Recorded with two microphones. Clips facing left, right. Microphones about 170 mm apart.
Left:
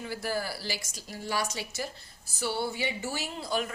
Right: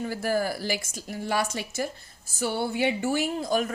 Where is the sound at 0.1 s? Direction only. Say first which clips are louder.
Right 5 dB; 50° right (ahead or behind).